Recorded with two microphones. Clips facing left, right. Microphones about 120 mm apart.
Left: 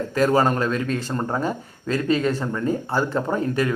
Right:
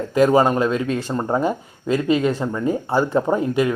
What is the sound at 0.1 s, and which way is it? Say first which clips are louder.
Speech: right 4 dB; 15° right (ahead or behind).